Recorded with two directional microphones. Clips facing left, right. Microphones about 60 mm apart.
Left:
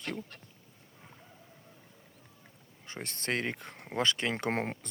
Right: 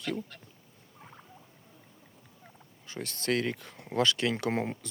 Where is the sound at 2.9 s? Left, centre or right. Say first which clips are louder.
Right 4 dB; left.